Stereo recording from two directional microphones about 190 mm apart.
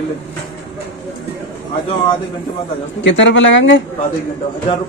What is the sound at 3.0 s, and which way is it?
Speech, 70° left (ahead or behind).